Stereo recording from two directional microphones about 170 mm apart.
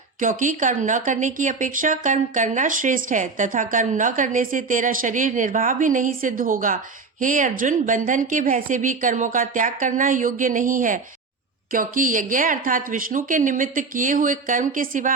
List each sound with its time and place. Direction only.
0.2 s speech: 50° right (ahead or behind)